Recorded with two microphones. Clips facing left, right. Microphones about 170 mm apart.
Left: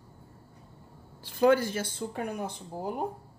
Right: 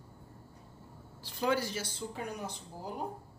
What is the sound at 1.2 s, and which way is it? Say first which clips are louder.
Speech: left 9 dB; 55° left (ahead or behind).